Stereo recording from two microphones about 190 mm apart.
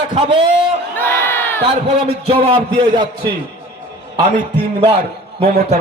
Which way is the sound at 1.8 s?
35° right (ahead or behind).